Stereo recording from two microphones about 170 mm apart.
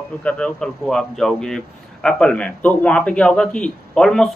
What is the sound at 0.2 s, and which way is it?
Speech, 5° left (ahead or behind).